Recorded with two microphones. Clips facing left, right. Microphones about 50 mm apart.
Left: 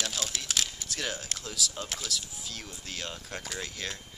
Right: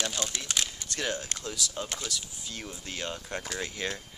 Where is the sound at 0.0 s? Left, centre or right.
Centre.